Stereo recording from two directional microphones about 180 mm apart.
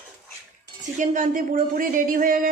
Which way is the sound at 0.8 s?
45° right (ahead or behind).